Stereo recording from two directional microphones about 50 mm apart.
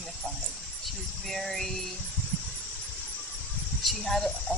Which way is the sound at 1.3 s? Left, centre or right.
Centre.